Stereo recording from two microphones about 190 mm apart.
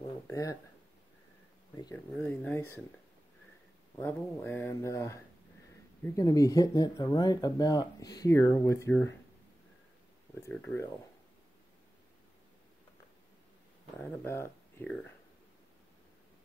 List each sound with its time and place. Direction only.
0.3 s speech: 15° left (ahead or behind)
2.1 s speech: 10° left (ahead or behind)
4.0 s speech: 10° left (ahead or behind)
10.5 s speech: 10° left (ahead or behind)
14.2 s speech: 10° left (ahead or behind)